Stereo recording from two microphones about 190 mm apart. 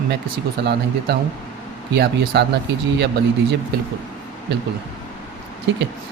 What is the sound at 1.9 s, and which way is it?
Speech, 60° right (ahead or behind).